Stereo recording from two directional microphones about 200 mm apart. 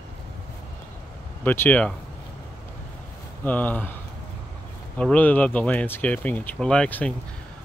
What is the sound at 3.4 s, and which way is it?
Speech, 10° left (ahead or behind).